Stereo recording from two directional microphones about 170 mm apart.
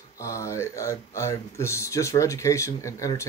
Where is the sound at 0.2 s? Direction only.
15° left (ahead or behind).